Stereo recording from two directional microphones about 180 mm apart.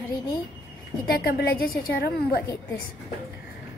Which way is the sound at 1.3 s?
60° left (ahead or behind).